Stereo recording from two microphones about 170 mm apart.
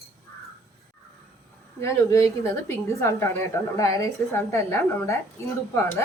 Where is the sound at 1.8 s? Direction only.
20° left (ahead or behind).